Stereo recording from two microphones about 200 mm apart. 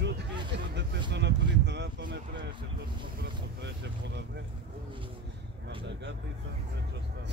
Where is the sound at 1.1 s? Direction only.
60° right (ahead or behind).